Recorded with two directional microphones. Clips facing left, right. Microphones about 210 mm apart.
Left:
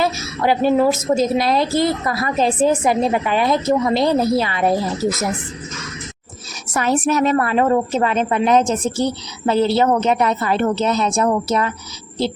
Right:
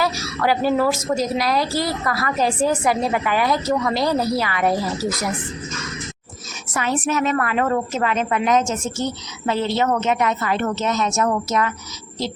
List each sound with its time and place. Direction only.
0.0 s a woman's voice: 20° left (ahead or behind)
6.7 s a woman's voice: 40° left (ahead or behind)